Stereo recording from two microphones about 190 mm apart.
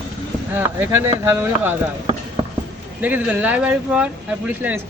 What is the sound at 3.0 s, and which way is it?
Speech, 10° right (ahead or behind).